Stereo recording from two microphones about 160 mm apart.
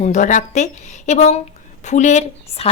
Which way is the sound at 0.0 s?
50° left (ahead or behind).